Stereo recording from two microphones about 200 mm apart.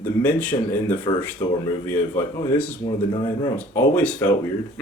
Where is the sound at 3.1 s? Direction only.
20° left (ahead or behind).